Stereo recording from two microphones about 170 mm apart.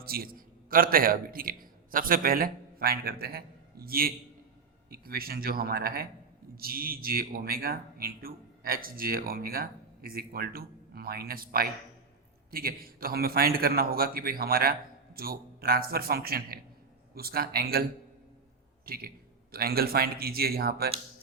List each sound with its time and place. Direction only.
0.0 s a man's voice: 60° right (ahead or behind)
18.9 s a man's voice: 65° right (ahead or behind)